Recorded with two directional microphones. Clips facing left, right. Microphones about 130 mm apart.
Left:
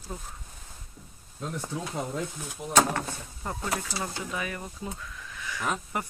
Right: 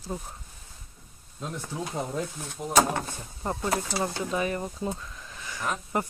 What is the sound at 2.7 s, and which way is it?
Speech, 15° right (ahead or behind).